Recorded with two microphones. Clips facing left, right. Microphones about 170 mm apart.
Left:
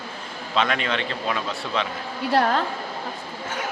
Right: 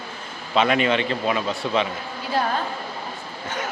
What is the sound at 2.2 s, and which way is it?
Speech, 70° left (ahead or behind).